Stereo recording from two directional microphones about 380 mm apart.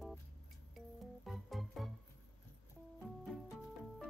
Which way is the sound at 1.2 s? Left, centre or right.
Centre.